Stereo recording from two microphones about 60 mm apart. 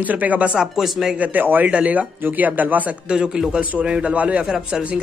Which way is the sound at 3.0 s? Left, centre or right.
Centre.